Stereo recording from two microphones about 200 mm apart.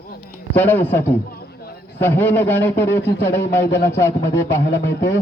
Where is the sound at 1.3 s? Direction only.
50° left (ahead or behind).